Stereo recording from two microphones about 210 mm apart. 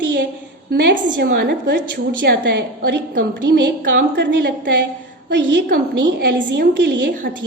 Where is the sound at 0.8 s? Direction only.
50° right (ahead or behind).